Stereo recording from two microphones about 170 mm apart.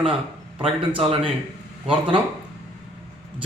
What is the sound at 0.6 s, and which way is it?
Speech, 30° right (ahead or behind).